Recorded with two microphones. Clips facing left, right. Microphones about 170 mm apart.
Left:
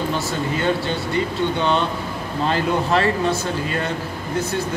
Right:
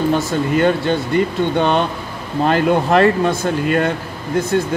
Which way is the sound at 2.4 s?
60° right (ahead or behind).